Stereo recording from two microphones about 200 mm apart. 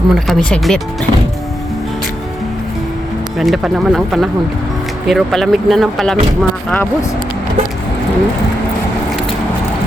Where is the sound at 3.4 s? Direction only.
Centre (ahead or behind).